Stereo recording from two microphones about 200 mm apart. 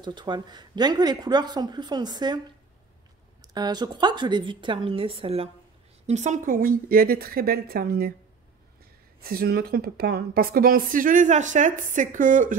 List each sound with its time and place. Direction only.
0.0 s speech: 20° right (ahead or behind)
3.5 s a woman's voice: 20° right (ahead or behind); by 8.1 s 50° right (ahead or behind)
9.2 s a woman's voice: 50° right (ahead or behind)